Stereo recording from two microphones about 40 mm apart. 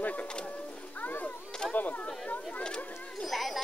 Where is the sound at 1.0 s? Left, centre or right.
Left.